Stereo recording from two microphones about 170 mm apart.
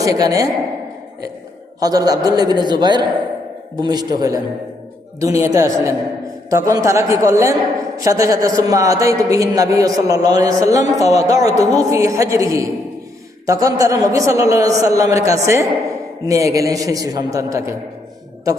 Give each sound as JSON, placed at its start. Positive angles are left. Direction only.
{"t": 0.0, "sound": "a man's voice", "side_deg": -20}
{"t": 1.8, "sound": "a man's voice", "side_deg": -20}